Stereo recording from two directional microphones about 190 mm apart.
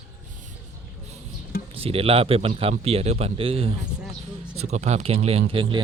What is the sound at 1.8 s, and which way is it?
Speech, 30° right (ahead or behind).